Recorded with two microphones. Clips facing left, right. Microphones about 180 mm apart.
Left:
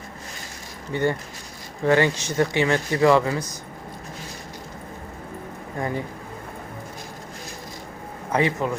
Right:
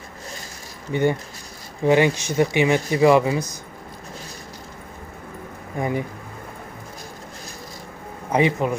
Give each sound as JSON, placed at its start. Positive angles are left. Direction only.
{"t": 0.9, "sound": "speech", "side_deg": -15}
{"t": 5.8, "sound": "speech", "side_deg": -15}
{"t": 8.3, "sound": "speech", "side_deg": -15}